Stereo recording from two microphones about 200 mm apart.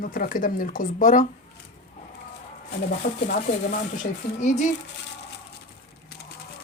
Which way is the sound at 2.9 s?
45° left (ahead or behind).